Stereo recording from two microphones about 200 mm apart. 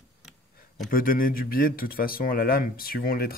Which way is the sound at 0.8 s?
45° left (ahead or behind).